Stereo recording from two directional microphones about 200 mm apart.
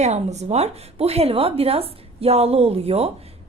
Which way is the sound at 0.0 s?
35° right (ahead or behind).